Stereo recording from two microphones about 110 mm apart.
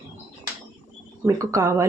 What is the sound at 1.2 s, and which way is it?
Speech, 30° right (ahead or behind).